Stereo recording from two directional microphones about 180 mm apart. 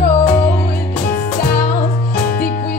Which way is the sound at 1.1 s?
55° left (ahead or behind).